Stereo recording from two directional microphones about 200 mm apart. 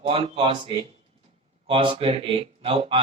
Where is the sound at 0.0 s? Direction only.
30° right (ahead or behind).